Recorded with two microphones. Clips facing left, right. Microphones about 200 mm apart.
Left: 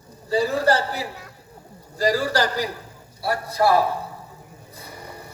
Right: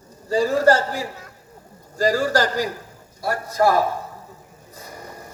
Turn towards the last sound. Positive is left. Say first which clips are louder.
# right 1 dB
turn(degrees=-40)  # may be behind; listen again after turning